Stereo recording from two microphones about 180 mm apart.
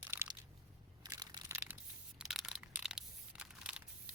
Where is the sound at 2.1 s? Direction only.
Centre (ahead or behind).